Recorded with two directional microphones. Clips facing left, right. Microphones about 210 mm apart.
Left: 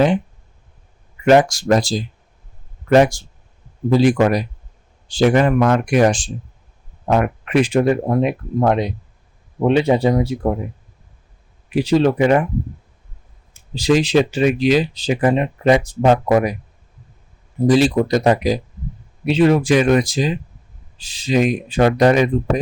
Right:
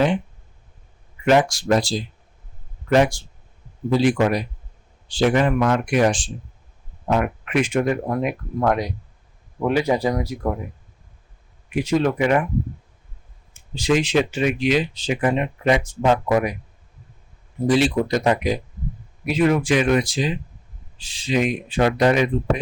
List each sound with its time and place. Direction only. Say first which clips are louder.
1.2 s speech: left 4 dB; 45° left (ahead or behind)
7.4 s speech: left 7 dB; 35° left (ahead or behind)
11.7 s speech: left 5 dB; 30° left (ahead or behind)
13.5 s speech: left 4 dB; 35° left (ahead or behind)
17.7 s speech: left 4 dB; 40° left (ahead or behind)